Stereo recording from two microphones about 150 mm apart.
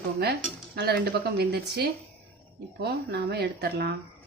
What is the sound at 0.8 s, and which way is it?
Speech, 90° right.